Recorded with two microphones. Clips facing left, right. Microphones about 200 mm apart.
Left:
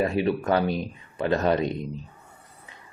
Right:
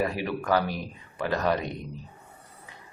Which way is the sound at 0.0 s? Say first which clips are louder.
Left 5 dB; 25° left (ahead or behind).